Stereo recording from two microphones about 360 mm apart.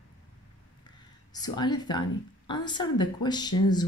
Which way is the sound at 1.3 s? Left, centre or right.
Centre.